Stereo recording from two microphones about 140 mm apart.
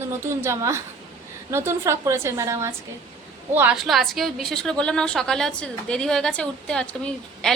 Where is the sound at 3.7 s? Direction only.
Centre (ahead or behind).